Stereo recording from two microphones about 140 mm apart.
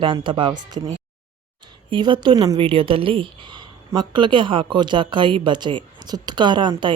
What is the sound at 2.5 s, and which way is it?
Speech, 40° right (ahead or behind).